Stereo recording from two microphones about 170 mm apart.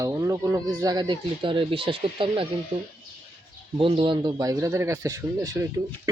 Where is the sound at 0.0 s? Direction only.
20° right (ahead or behind).